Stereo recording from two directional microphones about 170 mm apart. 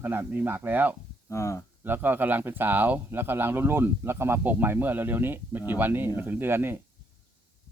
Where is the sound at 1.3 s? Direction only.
15° left (ahead or behind).